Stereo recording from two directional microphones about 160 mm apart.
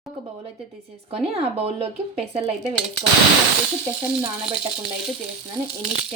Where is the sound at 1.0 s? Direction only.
40° right (ahead or behind).